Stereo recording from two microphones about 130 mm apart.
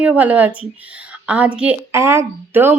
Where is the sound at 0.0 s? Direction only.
10° right (ahead or behind).